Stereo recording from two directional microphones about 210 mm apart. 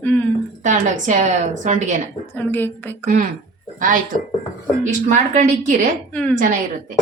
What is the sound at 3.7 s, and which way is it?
Speech, 40° right (ahead or behind).